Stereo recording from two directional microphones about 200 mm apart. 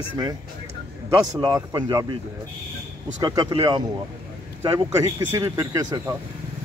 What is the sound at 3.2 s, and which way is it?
Speech, 20° right (ahead or behind).